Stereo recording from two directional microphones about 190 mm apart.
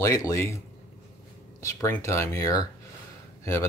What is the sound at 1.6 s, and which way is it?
Speech, 15° left (ahead or behind).